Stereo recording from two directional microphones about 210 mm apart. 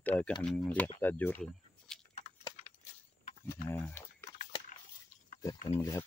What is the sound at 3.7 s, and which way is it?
Speech, 10° left (ahead or behind).